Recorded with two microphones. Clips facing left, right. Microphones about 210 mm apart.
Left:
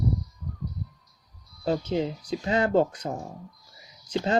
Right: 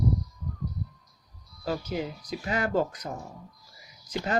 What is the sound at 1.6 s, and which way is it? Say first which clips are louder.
Speech: left 5 dB; 30° left (ahead or behind).